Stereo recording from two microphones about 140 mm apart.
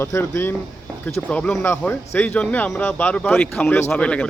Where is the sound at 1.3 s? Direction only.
5° left (ahead or behind).